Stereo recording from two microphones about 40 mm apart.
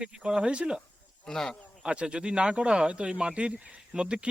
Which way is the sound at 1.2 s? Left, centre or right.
Centre.